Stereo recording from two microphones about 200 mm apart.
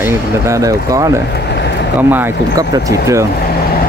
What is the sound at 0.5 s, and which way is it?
Speech, 15° right (ahead or behind).